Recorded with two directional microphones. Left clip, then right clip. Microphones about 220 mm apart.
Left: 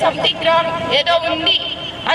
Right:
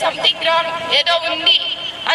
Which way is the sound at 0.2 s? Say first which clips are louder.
Left 1 dB; 10° left (ahead or behind).